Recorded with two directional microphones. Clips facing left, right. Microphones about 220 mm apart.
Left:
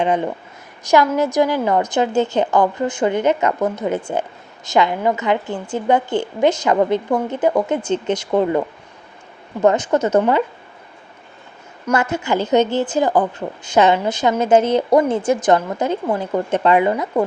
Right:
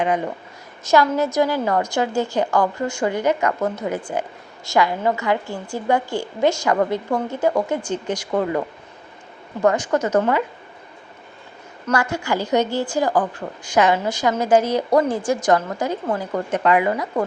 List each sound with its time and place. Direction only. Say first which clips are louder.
0.9 s a woman's voice: left 2 dB; 15° left (ahead or behind)
9.6 s a woman's voice: left 3 dB; 20° left (ahead or behind)
11.9 s a woman's voice: left 3 dB; 20° left (ahead or behind)